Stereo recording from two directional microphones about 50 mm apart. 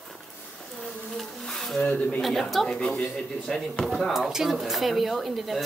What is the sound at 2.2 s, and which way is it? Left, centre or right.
Speech, centre.